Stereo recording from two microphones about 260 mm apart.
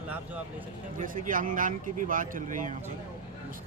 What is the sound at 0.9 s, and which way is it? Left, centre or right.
Speech, right.